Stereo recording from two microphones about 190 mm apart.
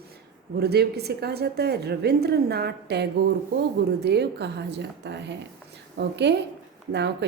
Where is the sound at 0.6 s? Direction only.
55° right (ahead or behind).